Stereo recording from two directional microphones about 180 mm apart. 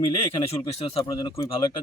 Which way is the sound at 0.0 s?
30° left (ahead or behind).